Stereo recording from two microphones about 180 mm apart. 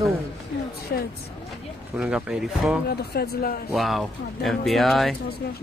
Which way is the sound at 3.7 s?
Centre (ahead or behind).